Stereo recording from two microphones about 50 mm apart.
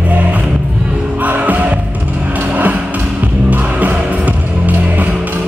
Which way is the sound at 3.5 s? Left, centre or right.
Right.